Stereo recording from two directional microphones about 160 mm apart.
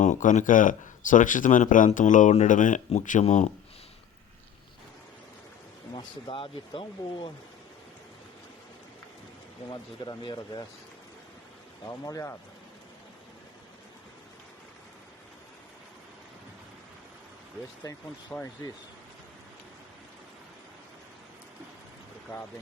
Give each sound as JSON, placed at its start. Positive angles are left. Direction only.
{"t": 0.0, "sound": "speech", "side_deg": 50}
{"t": 5.9, "sound": "speech", "side_deg": 30}
{"t": 9.6, "sound": "speech", "side_deg": 25}
{"t": 11.9, "sound": "speech", "side_deg": 20}
{"t": 17.8, "sound": "speech", "side_deg": 10}